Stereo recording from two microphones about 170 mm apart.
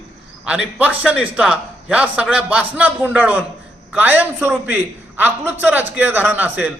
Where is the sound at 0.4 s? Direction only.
5° right (ahead or behind).